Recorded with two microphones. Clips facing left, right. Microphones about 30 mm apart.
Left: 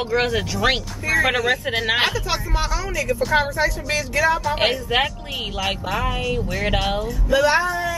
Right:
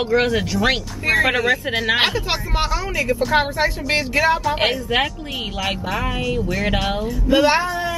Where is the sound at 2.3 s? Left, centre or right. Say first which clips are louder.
Right 2 dB; right.